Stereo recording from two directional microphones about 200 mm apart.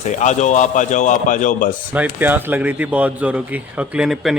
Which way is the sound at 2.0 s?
10° right (ahead or behind).